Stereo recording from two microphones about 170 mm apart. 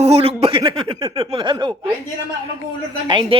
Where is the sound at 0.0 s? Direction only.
35° right (ahead or behind).